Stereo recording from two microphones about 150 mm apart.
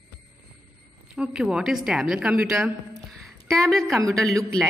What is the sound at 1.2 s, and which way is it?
A woman's voice, 5° right (ahead or behind).